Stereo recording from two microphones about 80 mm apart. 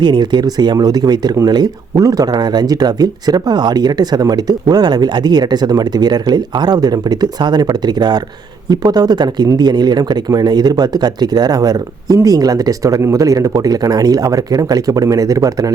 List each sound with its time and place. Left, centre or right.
0.0 s speech: right
2.0 s speech: right